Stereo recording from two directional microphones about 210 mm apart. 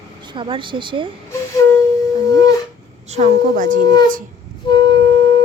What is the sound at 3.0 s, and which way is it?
Speech, 30° right (ahead or behind).